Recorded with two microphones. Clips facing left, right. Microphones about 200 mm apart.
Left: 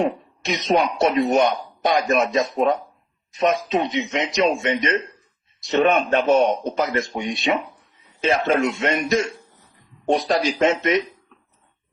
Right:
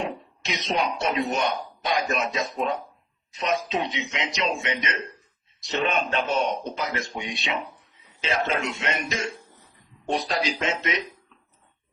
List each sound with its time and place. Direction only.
0.4 s speech: 50° left (ahead or behind)
3.4 s speech: 55° left (ahead or behind)
10.2 s speech: 45° left (ahead or behind)